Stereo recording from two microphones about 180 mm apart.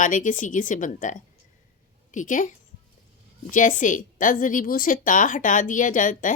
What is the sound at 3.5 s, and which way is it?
Speech, 45° left (ahead or behind).